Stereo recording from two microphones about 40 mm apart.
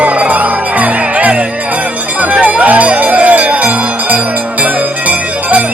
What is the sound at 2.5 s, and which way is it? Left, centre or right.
Music, right.